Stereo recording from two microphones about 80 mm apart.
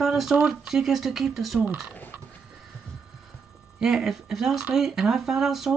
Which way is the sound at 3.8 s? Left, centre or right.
Centre.